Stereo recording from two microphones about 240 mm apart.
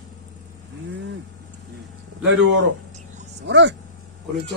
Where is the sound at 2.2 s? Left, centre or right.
Right.